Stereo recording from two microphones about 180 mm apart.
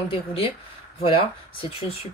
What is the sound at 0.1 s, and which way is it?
Speech, 30° left (ahead or behind).